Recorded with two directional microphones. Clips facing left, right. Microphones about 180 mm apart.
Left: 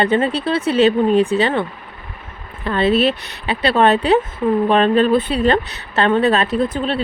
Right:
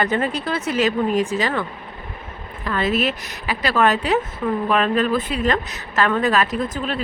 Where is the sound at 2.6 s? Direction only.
30° left (ahead or behind).